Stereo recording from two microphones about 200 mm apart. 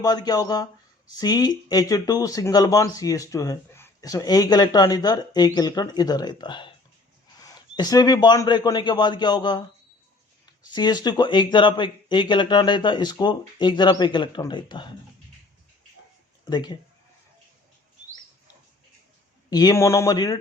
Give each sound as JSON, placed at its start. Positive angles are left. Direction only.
{"t": 0.0, "sound": "speech", "side_deg": 20}
{"t": 16.5, "sound": "speech", "side_deg": 20}
{"t": 19.5, "sound": "speech", "side_deg": 20}